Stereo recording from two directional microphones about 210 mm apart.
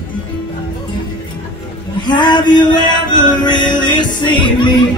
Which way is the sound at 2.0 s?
20° left (ahead or behind).